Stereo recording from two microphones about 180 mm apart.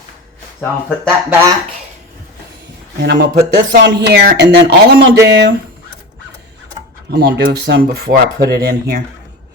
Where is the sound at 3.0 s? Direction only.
65° right (ahead or behind).